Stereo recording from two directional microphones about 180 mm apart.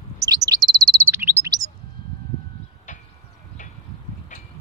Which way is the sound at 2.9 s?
45° left (ahead or behind).